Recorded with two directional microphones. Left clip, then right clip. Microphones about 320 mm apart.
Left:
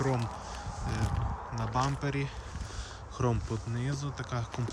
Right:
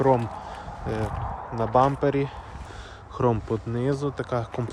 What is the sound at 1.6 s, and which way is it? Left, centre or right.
Speech, centre.